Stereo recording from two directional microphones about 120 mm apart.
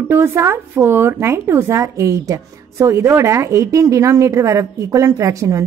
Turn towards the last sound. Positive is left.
turn(degrees=-25)  # may be behind; listen again after turning